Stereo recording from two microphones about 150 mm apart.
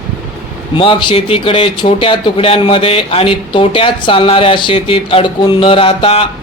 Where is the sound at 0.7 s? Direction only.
35° left (ahead or behind).